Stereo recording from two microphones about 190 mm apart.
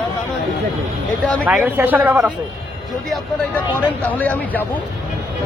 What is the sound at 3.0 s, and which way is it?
Speech, 10° left (ahead or behind).